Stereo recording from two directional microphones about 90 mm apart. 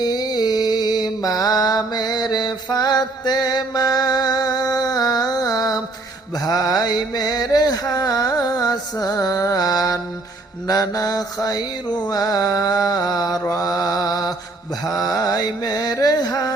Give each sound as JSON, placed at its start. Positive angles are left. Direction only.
{"t": 0.0, "sound": "mantra", "side_deg": 50}
{"t": 10.7, "sound": "music", "side_deg": 45}